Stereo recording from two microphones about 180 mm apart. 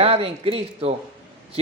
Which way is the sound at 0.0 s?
30° right (ahead or behind).